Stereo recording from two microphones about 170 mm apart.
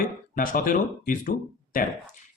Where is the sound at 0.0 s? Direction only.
55° left (ahead or behind).